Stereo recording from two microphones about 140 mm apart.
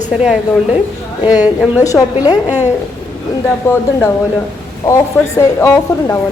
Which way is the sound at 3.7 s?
20° left (ahead or behind).